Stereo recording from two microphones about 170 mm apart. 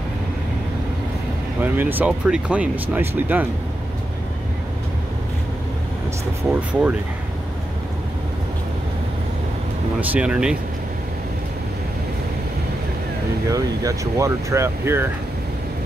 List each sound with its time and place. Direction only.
1.6 s speech: 10° right (ahead or behind)
6.5 s speech: 5° right (ahead or behind)
9.9 s speech: 10° right (ahead or behind)
13.5 s speech: 20° right (ahead or behind)